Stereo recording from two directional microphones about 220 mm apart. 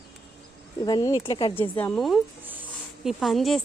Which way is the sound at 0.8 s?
20° left (ahead or behind).